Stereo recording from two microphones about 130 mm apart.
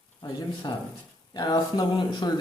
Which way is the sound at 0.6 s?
35° left (ahead or behind).